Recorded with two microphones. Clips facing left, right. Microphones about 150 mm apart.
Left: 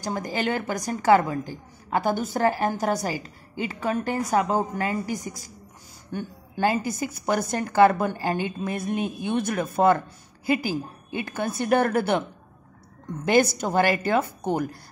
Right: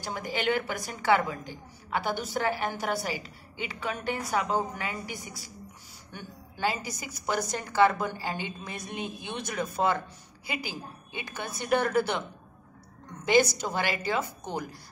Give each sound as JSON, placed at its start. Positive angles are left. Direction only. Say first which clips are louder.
{"t": 0.0, "sound": "a woman's voice", "louder": "left 4 dB", "side_deg": 40}
{"t": 13.2, "sound": "a woman's voice", "louder": "left 3 dB", "side_deg": 55}